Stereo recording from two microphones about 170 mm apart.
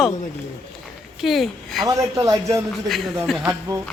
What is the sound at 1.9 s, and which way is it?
Speech, 20° right (ahead or behind).